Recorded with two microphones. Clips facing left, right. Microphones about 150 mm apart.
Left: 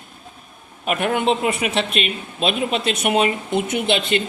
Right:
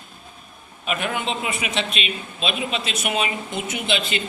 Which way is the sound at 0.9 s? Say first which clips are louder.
Left 6 dB; 55° left (ahead or behind).